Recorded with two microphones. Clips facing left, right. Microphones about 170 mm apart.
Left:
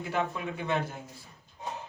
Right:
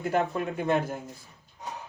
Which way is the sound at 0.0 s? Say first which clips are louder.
Right 5 dB; 60° right (ahead or behind).